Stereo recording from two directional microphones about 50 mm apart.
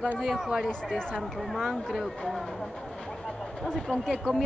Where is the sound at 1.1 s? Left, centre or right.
Centre.